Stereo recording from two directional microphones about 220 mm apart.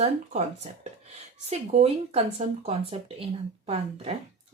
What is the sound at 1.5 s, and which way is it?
Speech, 30° right (ahead or behind).